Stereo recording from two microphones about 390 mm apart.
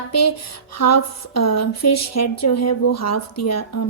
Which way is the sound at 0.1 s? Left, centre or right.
Left.